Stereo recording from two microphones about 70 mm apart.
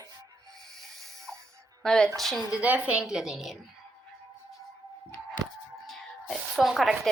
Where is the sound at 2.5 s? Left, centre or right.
Centre.